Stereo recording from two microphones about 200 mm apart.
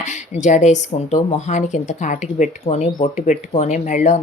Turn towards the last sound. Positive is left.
turn(degrees=35)  # may be behind; listen again after turning